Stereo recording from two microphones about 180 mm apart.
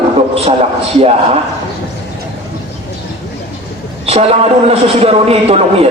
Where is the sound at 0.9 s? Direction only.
35° right (ahead or behind).